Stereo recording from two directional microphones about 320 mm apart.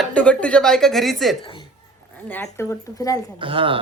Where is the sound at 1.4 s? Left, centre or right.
Centre.